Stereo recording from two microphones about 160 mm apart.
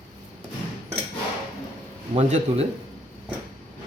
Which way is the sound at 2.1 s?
40° right (ahead or behind).